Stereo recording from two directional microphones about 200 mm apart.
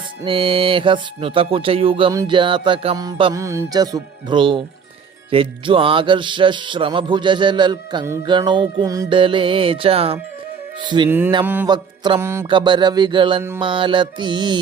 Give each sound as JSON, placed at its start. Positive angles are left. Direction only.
{"t": 0.3, "sound": "music", "side_deg": -25}
{"t": 11.4, "sound": "music", "side_deg": -10}
{"t": 11.7, "sound": "music", "side_deg": -20}